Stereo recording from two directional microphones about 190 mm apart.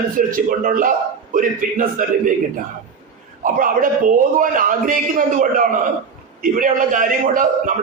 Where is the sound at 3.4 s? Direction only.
45° right (ahead or behind).